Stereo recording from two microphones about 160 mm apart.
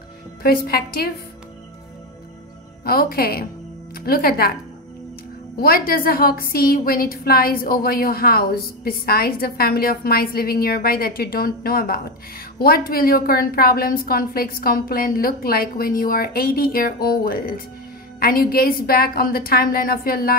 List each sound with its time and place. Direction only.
0.4 s a woman's voice: 70° left (ahead or behind)
2.8 s a woman's voice: 70° left (ahead or behind)
5.6 s a woman's voice: 70° left (ahead or behind)